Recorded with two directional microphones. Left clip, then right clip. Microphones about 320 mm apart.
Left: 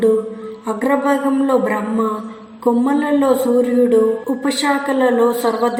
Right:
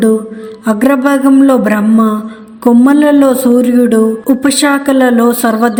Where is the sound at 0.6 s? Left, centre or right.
Right.